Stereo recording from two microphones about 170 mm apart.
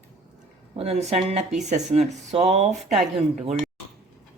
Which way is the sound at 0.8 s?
40° right (ahead or behind).